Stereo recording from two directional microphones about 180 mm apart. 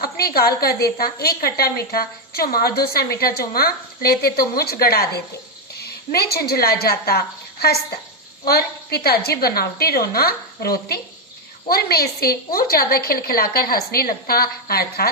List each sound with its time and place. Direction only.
0.0 s a woman's voice: 60° left (ahead or behind)